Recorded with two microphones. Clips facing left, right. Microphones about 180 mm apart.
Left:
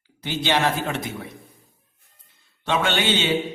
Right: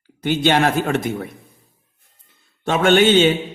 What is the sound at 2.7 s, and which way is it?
Speech, 50° right (ahead or behind).